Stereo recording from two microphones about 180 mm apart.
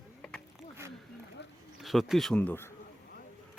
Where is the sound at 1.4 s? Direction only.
70° left (ahead or behind).